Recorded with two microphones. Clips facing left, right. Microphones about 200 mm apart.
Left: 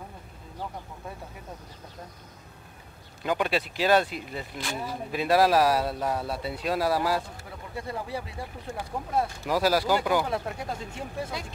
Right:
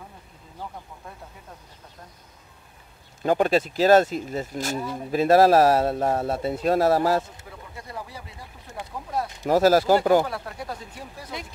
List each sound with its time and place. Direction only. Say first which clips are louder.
3.2 s speech: right 6 dB; 45° right (ahead or behind)
7.8 s speech: left 4 dB; 30° left (ahead or behind)
9.5 s speech: right 7 dB; 45° right (ahead or behind)
10.3 s speech: left 2 dB; 25° left (ahead or behind)